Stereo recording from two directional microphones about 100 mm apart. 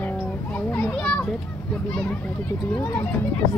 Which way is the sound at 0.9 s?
15° left (ahead or behind).